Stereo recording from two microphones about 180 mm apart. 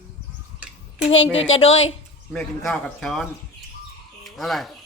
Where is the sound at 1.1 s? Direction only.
90° left.